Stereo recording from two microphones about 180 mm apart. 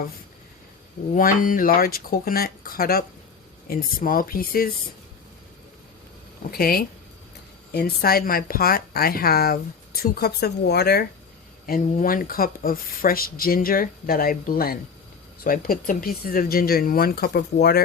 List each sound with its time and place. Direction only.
1.1 s a woman's voice: 50° left (ahead or behind)
6.5 s a woman's voice: 55° left (ahead or behind)
11.6 s a woman's voice: 50° left (ahead or behind)